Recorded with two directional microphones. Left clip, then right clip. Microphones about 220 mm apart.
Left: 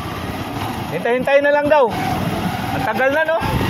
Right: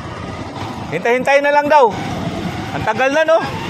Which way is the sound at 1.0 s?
20° right (ahead or behind).